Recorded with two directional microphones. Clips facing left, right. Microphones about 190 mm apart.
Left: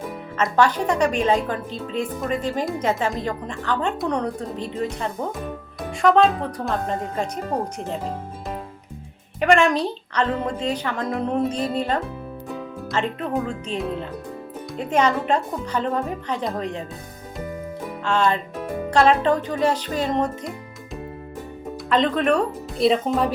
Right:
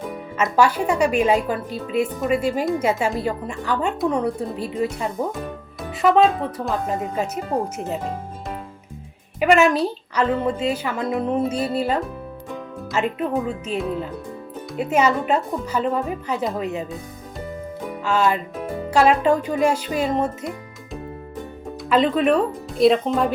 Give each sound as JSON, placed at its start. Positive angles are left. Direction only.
{"t": 0.3, "sound": "speech", "side_deg": -10}
{"t": 9.4, "sound": "speech", "side_deg": -5}
{"t": 18.0, "sound": "speech", "side_deg": -5}
{"t": 21.8, "sound": "speech", "side_deg": -5}